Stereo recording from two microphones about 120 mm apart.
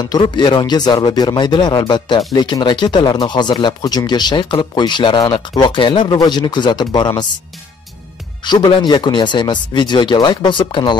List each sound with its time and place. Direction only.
0.0 s speech: 35° left (ahead or behind)
8.5 s speech: 35° left (ahead or behind)